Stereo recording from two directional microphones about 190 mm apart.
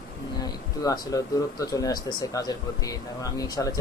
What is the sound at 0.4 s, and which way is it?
Speech, 20° left (ahead or behind).